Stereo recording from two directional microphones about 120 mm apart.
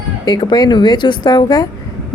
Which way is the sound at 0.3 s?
35° left (ahead or behind).